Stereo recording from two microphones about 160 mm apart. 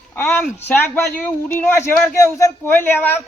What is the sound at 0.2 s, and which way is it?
A woman's voice, 15° left (ahead or behind).